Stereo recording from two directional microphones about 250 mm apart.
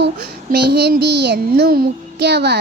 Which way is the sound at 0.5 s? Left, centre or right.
Right.